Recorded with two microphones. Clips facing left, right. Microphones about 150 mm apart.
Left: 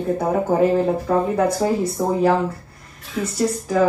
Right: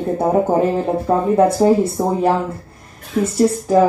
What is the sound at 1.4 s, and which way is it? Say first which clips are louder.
Speech: right 6 dB; 25° right (ahead or behind).